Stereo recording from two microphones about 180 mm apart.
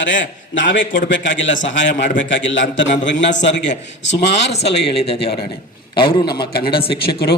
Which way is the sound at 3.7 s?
75° left (ahead or behind).